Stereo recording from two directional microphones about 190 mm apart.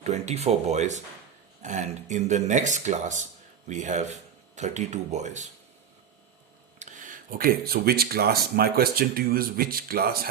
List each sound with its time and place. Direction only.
0.0 s speech: 35° right (ahead or behind)
6.7 s speech: 40° right (ahead or behind)